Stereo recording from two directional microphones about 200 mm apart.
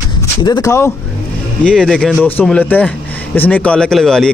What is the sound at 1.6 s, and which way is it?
Speech, 5° left (ahead or behind).